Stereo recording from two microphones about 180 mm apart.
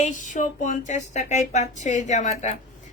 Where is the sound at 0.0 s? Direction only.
45° left (ahead or behind).